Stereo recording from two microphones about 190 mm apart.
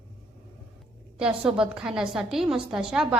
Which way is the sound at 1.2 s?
5° right (ahead or behind).